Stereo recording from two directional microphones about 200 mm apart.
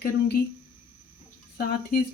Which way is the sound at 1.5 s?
50° left (ahead or behind).